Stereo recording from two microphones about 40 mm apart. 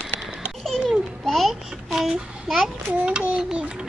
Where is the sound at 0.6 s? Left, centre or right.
Centre.